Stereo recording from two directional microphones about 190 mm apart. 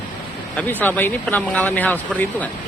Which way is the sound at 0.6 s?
10° left (ahead or behind).